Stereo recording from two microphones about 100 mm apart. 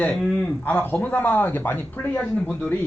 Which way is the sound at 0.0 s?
10° left (ahead or behind).